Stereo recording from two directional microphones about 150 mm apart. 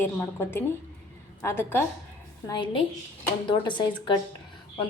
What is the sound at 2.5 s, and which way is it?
Speech, 35° left (ahead or behind).